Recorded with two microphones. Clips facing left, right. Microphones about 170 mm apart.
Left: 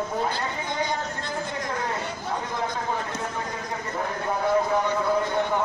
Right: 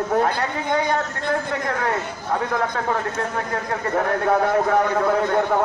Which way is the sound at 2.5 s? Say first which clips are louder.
Right 6 dB; 70° right (ahead or behind).